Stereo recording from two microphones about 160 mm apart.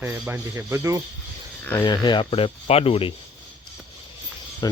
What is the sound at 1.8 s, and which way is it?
Speech, 25° left (ahead or behind).